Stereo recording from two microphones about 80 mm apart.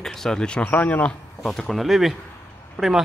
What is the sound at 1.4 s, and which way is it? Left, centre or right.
Speech, centre.